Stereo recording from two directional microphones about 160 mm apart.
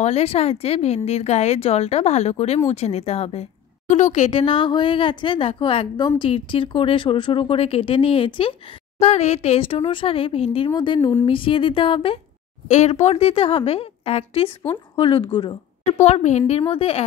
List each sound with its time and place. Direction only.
0.0 s speech: 40° left (ahead or behind)
9.0 s speech: 45° left (ahead or behind)
16.0 s speech: 45° left (ahead or behind)